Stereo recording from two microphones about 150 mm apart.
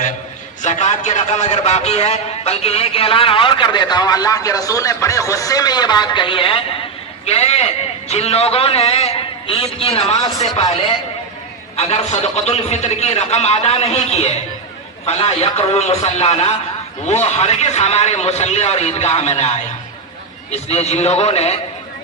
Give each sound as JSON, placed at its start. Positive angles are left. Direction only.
{"t": 0.6, "sound": "a man's voice", "side_deg": 50}